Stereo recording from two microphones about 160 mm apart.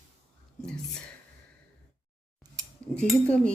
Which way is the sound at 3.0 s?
5° left (ahead or behind).